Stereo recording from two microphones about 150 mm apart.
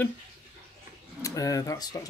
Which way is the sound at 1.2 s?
20° left (ahead or behind).